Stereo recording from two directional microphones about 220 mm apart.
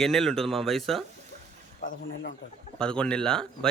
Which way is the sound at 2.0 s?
55° left (ahead or behind).